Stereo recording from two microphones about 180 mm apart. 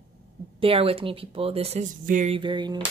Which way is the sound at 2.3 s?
25° right (ahead or behind).